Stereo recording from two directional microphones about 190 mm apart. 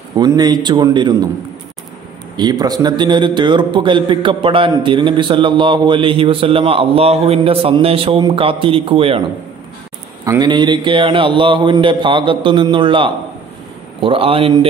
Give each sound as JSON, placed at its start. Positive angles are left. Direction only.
{"t": 0.2, "sound": "a man's voice", "side_deg": -20}
{"t": 2.3, "sound": "a man's voice", "side_deg": -20}
{"t": 10.2, "sound": "a man's voice", "side_deg": -20}